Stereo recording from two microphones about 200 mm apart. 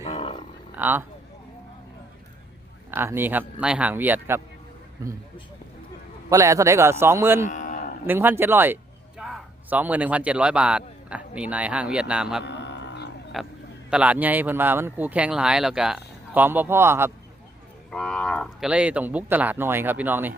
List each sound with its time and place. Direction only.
0.0 s cattle: 30° left (ahead or behind)
0.8 s speech: 10° right (ahead or behind)
2.9 s speech: 10° right (ahead or behind)
6.3 s speech: 15° right (ahead or behind)
7.4 s cattle: 40° left (ahead or behind)
8.0 s a man's voice: 10° right (ahead or behind)
12.5 s a sound: 60° left (ahead or behind)
13.4 s a man's voice: centre (ahead or behind)
17.9 s speech: 5° left (ahead or behind)